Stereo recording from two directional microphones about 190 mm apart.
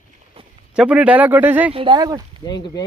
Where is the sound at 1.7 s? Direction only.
25° right (ahead or behind).